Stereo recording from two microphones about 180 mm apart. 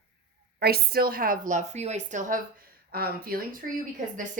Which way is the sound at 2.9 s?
55° right (ahead or behind).